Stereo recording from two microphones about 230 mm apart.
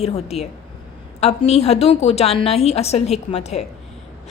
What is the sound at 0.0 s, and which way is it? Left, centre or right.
A woman's voice, left.